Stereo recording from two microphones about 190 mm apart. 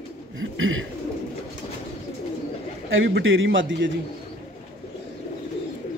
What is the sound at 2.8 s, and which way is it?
A man's voice, 85° right.